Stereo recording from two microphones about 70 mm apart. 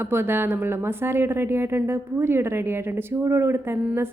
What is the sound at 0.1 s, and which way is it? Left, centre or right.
A woman's voice, right.